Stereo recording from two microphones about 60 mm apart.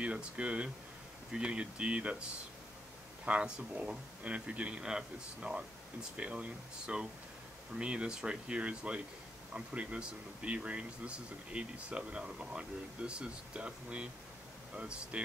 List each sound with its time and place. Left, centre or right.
0.0 s speech: centre
3.3 s speech: centre